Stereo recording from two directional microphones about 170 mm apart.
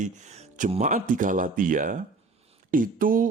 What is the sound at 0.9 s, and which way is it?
Speech, 55° right (ahead or behind).